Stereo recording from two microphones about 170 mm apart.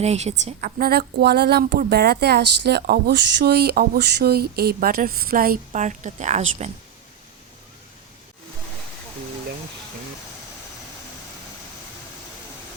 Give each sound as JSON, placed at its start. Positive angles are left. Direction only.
{"t": 0.0, "sound": "a woman's voice", "side_deg": -40}
{"t": 0.6, "sound": "a woman's voice", "side_deg": -65}